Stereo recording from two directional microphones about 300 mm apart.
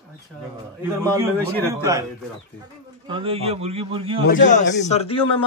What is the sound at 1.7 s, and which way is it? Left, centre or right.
Speech, centre.